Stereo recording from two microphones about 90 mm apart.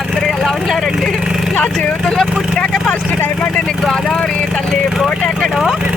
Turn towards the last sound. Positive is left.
turn(degrees=0)  # may be behind; listen again after turning